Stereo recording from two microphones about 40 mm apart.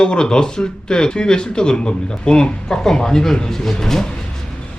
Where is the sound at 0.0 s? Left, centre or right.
Left.